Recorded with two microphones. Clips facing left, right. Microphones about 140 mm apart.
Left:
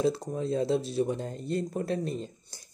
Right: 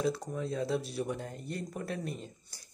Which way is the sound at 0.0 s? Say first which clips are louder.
Left 5 dB; 30° left (ahead or behind).